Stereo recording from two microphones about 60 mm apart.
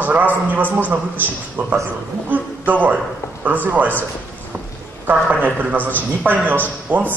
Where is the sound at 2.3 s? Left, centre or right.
Right.